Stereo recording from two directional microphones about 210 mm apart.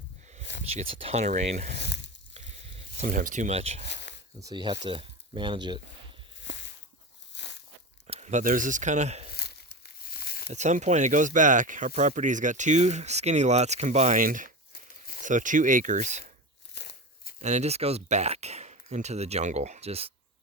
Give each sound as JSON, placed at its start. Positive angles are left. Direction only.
{"t": 0.7, "sound": "speech", "side_deg": -30}
{"t": 1.8, "sound": "frying", "side_deg": 55}
{"t": 2.7, "sound": "speech", "side_deg": -35}
{"t": 3.8, "sound": "a sound", "side_deg": 55}
{"t": 4.4, "sound": "speech", "side_deg": -20}
{"t": 7.3, "sound": "a sound", "side_deg": 55}
{"t": 8.0, "sound": "speech", "side_deg": -30}
{"t": 9.3, "sound": "crumpling", "side_deg": 50}
{"t": 10.5, "sound": "speech", "side_deg": -35}
{"t": 16.7, "sound": "a sound", "side_deg": 55}
{"t": 17.4, "sound": "speech", "side_deg": -35}